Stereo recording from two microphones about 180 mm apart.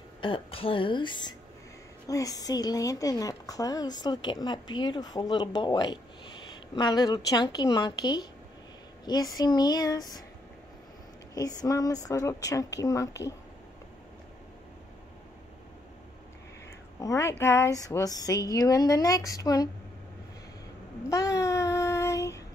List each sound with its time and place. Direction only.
0.2 s a woman's voice: 30° left (ahead or behind)
11.3 s a woman's voice: 20° left (ahead or behind)
17.0 s a woman's voice: 15° left (ahead or behind)
21.1 s child singing: 15° left (ahead or behind)